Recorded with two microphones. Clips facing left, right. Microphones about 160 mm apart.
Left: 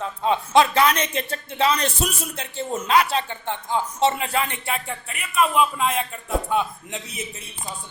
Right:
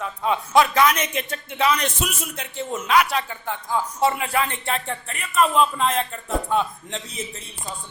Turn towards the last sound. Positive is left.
turn(degrees=10)  # may be behind; listen again after turning